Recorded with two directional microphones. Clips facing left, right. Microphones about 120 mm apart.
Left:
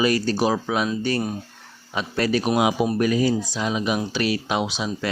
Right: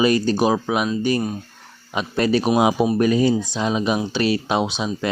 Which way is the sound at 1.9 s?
25° right (ahead or behind).